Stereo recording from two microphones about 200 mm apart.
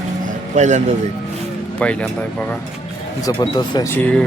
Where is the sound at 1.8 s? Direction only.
5° left (ahead or behind).